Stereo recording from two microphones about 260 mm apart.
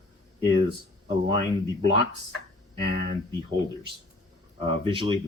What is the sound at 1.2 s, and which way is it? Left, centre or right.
Speech, right.